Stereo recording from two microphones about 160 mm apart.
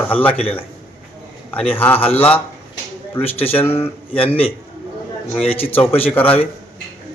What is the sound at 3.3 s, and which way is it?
A man's voice, 35° left (ahead or behind).